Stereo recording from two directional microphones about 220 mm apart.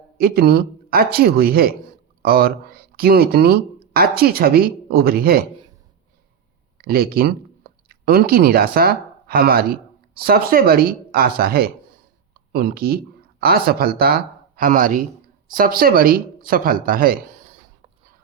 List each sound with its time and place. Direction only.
0.2 s speech: 45° right (ahead or behind)
6.7 s speech: 45° right (ahead or behind)